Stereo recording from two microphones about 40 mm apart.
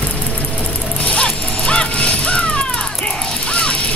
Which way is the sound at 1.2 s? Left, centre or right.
Left.